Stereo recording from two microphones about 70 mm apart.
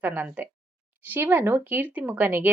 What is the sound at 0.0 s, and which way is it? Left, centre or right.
A woman's voice, right.